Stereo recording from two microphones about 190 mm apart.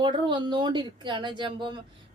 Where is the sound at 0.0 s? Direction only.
25° right (ahead or behind).